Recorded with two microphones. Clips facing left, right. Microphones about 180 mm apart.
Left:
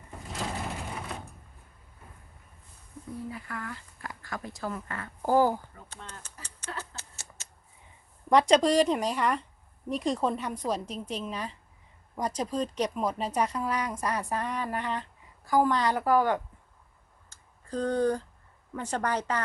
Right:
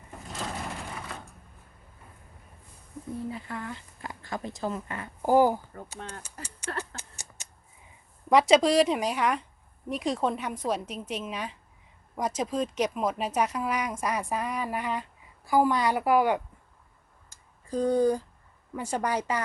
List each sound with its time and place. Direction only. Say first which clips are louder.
0.3 s vehicle: left 1 dB; centre (ahead or behind)
3.2 s a woman's voice: right 3 dB; 25° right (ahead or behind)
6.9 s a sound: right 2 dB; 15° right (ahead or behind)
8.3 s a woman's voice: right 1 dB; 5° right (ahead or behind)
17.2 s a sound: right 2 dB; 10° right (ahead or behind)
18.7 s a woman's voice: right 1 dB; 10° right (ahead or behind)